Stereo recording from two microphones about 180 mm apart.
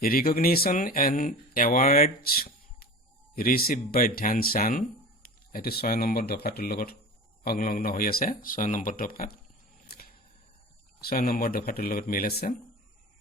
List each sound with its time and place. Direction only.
0.0 s speech: 55° left (ahead or behind)
9.9 s a sound: 60° left (ahead or behind)
11.0 s speech: 55° left (ahead or behind)